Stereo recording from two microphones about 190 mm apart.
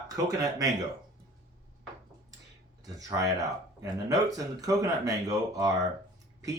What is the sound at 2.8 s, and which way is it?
Speech, 20° right (ahead or behind).